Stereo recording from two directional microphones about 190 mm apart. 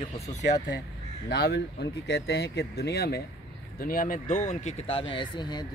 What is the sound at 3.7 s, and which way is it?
Speech, 45° left (ahead or behind).